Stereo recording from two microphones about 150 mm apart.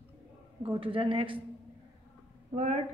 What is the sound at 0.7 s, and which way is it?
Speech, 35° right (ahead or behind).